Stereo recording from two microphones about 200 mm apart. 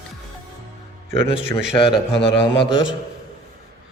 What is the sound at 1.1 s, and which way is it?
A man's voice, 25° left (ahead or behind).